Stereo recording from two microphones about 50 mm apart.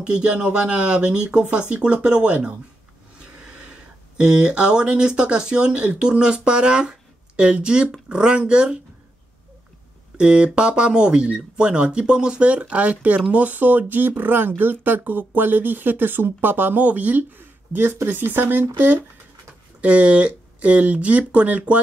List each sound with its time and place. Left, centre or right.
0.0 s speech: right
10.1 s speech: centre; by 18.7 s right
19.8 s speech: right